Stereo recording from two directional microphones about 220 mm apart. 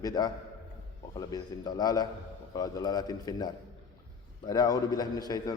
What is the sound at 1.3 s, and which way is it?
A man's voice, 20° left (ahead or behind).